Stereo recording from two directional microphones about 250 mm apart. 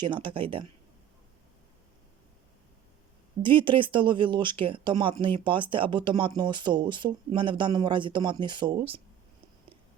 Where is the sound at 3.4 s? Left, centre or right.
Centre.